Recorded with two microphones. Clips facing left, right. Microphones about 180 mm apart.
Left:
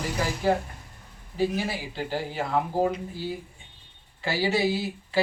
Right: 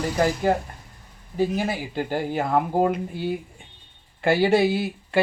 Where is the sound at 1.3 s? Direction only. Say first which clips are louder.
Right 3 dB; 50° right (ahead or behind).